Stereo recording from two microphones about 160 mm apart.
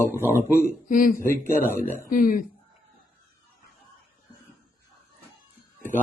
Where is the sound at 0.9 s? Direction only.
60° left (ahead or behind).